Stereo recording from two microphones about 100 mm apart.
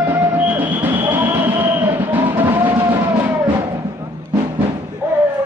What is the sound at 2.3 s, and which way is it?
Vehicle, 20° right (ahead or behind).